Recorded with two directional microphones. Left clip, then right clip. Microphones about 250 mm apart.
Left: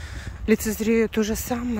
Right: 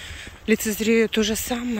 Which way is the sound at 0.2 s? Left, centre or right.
Centre.